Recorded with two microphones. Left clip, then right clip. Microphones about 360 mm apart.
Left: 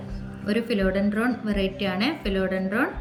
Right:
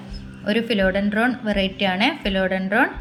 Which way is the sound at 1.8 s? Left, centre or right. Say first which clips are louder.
Right 6 dB; right.